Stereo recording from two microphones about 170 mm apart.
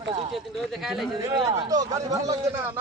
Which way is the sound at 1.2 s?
20° right (ahead or behind).